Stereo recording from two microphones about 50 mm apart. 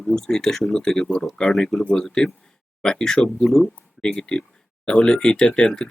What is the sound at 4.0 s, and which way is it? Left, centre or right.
Speech, centre.